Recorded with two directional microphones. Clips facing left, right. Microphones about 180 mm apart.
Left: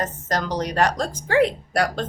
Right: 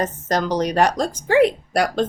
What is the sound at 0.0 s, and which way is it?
Speech, 20° right (ahead or behind).